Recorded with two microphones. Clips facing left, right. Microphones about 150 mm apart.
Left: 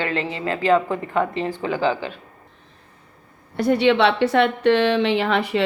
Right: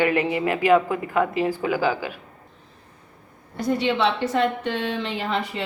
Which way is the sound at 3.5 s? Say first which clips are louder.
Left 6 dB; 70° left (ahead or behind).